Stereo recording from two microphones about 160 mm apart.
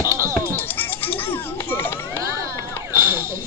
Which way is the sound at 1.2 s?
15° left (ahead or behind).